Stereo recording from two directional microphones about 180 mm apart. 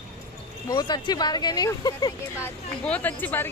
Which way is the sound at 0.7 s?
25° left (ahead or behind).